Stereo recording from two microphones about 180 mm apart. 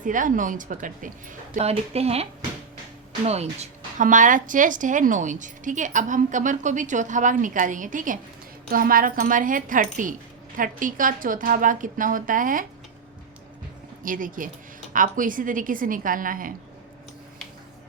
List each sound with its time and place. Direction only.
0.0 s a woman's voice: 45° right (ahead or behind)
1.5 s speech: 35° right (ahead or behind)
3.2 s a woman's voice: 35° right (ahead or behind)
14.0 s a woman's voice: 50° right (ahead or behind)